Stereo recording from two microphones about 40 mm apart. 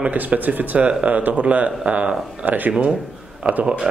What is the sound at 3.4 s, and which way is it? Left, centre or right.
Speech, right.